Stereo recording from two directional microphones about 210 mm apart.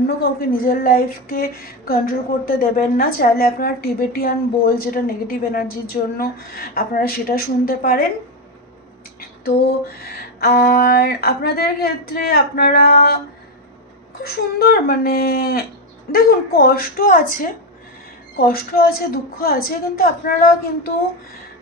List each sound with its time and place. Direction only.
0.0 s speech: 45° left (ahead or behind)
9.2 s a sound: 45° left (ahead or behind)
10.4 s speech: 50° left (ahead or behind)